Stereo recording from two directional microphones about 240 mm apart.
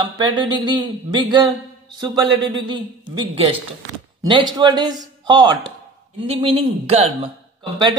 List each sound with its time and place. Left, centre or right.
0.0 s a man's voice: centre